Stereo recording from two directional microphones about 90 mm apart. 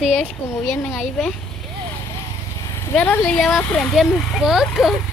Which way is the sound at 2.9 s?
20° left (ahead or behind).